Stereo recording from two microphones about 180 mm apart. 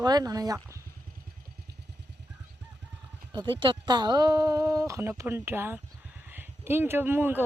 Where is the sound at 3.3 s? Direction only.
25° right (ahead or behind).